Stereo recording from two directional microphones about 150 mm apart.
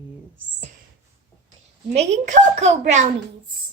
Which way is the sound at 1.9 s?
50° right (ahead or behind).